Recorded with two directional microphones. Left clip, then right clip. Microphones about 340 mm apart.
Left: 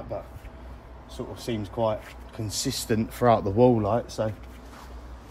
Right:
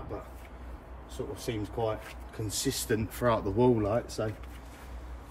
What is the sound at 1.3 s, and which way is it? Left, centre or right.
Speech, centre.